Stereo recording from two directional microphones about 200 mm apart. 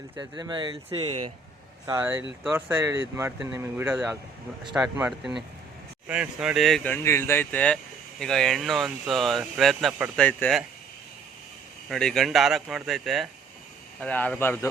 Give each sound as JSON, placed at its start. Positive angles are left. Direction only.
{"t": 0.2, "sound": "speech", "side_deg": -20}
{"t": 1.9, "sound": "speech", "side_deg": -10}
{"t": 11.9, "sound": "speech", "side_deg": 0}